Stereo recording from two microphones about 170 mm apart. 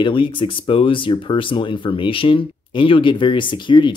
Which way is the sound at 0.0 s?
30° left (ahead or behind).